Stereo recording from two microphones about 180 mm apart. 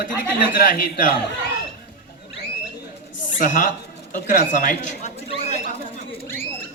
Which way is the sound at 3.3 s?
45° left (ahead or behind).